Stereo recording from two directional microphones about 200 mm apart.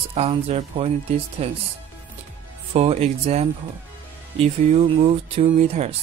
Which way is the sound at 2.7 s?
30° right (ahead or behind).